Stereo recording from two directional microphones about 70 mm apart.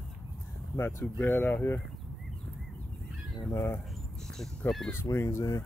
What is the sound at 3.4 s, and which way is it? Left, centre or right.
Speech, left.